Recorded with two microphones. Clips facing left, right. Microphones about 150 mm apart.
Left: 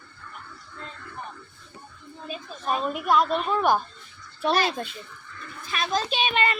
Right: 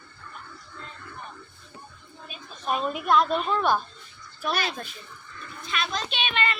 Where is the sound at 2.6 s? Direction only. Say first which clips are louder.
Left 1 dB; centre (ahead or behind).